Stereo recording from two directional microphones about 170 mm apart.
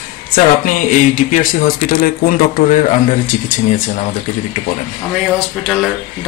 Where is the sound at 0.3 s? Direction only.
55° left (ahead or behind).